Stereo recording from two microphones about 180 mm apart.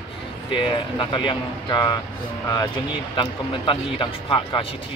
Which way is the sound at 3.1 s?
30° left (ahead or behind).